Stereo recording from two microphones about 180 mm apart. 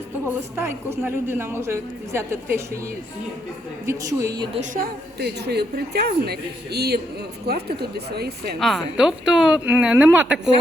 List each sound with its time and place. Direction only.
0.3 s a woman's voice: 15° right (ahead or behind)
3.8 s a woman's voice: 15° right (ahead or behind)
4.7 s a woman's voice: 60° right (ahead or behind)
8.5 s a woman's voice: centre (ahead or behind)